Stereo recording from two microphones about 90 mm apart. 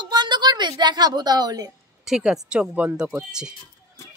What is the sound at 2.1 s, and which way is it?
Speech, 5° right (ahead or behind).